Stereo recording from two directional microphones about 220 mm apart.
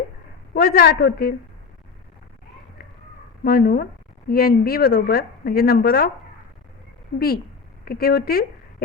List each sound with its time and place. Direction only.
0.5 s speech: 45° left (ahead or behind)
3.4 s speech: 45° left (ahead or behind)
7.9 s speech: 45° left (ahead or behind)